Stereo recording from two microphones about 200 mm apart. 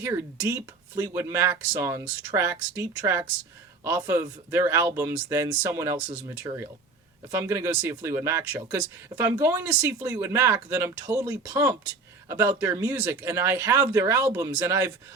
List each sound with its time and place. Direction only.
0.0 s speech: 10° right (ahead or behind)